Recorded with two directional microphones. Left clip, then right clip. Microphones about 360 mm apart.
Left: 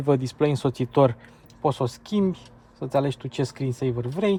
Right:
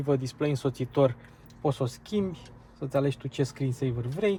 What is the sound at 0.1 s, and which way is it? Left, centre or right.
Speech, centre.